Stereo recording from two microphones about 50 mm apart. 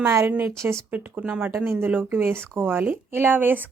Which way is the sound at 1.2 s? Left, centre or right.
Right.